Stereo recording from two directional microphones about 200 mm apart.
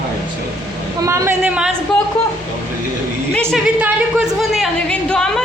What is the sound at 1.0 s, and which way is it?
Speech, 15° right (ahead or behind).